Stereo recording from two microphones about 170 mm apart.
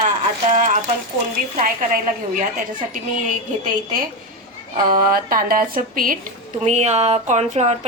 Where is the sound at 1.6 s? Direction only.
55° right (ahead or behind).